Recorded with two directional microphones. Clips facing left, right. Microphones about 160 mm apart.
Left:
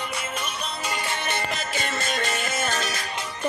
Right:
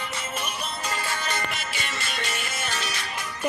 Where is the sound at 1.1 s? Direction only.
25° left (ahead or behind).